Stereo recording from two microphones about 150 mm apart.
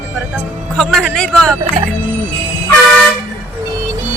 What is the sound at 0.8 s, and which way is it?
Speech, centre (ahead or behind).